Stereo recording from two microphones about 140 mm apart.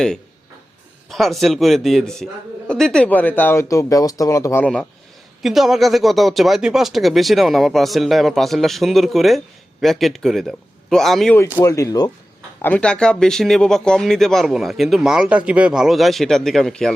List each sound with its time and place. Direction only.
1.1 s a man's voice: centre (ahead or behind); by 4.6 s 25° left (ahead or behind)
4.6 s speech: 5° left (ahead or behind)
11.5 s speech: 20° left (ahead or behind)
12.6 s speech: 5° left (ahead or behind)